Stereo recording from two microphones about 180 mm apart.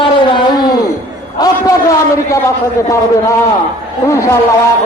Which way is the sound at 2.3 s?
15° left (ahead or behind).